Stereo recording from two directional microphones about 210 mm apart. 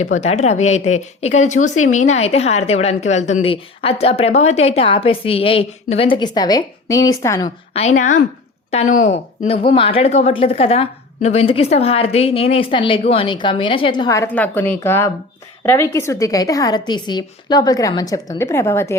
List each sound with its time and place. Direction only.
0.0 s a woman's voice: 30° left (ahead or behind); by 7.4 s 15° left (ahead or behind)
7.4 s a woman's voice: 30° left (ahead or behind); by 18.9 s 10° left (ahead or behind)